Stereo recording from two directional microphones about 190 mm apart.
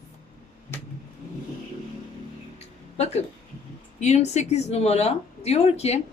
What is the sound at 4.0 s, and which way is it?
Speech, 35° left (ahead or behind).